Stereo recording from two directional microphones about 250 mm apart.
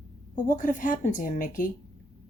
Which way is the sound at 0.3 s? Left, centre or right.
Left.